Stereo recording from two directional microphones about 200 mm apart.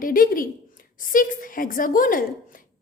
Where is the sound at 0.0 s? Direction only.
45° left (ahead or behind).